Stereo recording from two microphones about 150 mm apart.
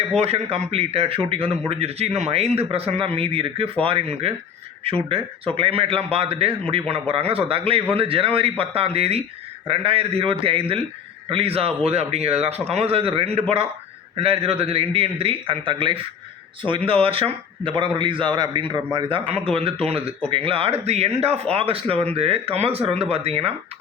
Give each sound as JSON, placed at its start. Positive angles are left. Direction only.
{"t": 0.2, "sound": "a man's voice", "side_deg": -45}
{"t": 5.5, "sound": "a man's voice", "side_deg": -40}